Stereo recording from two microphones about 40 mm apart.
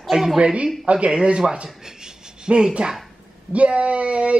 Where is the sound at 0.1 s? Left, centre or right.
Centre.